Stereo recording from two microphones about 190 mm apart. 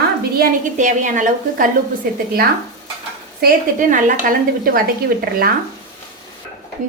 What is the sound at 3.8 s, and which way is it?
A woman's voice, 45° right (ahead or behind).